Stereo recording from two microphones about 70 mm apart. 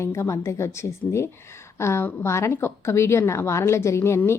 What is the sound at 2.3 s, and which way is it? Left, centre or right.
Speech, left.